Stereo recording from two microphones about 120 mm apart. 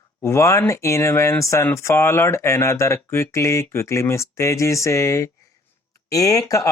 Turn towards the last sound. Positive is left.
turn(degrees=30)  # may be behind; listen again after turning